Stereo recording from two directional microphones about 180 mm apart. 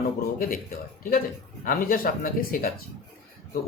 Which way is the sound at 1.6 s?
50° left (ahead or behind).